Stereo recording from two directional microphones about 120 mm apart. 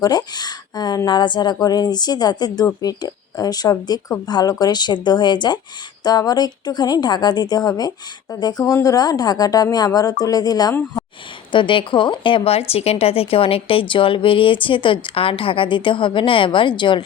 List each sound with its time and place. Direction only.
0.0 s a woman's voice: 35° left (ahead or behind)
11.5 s speech: 45° left (ahead or behind)